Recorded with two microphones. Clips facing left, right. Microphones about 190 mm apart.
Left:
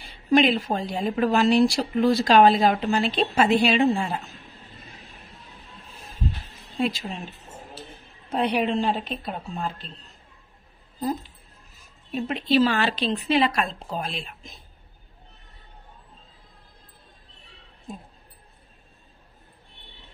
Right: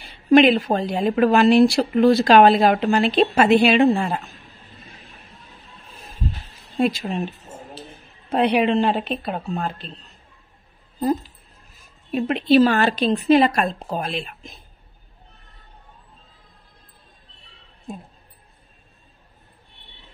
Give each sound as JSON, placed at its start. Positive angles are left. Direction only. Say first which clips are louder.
{"t": 0.3, "sound": "speech", "louder": "right 6 dB", "side_deg": -60}
{"t": 6.8, "sound": "speech", "louder": "right 6 dB", "side_deg": -55}
{"t": 8.3, "sound": "speech", "louder": "right 5 dB", "side_deg": -70}
{"t": 12.1, "sound": "speech", "louder": "right 6 dB", "side_deg": -65}